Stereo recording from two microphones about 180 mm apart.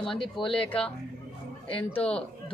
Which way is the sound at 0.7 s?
5° left (ahead or behind).